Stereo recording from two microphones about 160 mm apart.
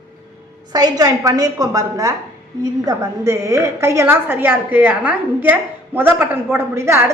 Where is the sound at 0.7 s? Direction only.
25° right (ahead or behind).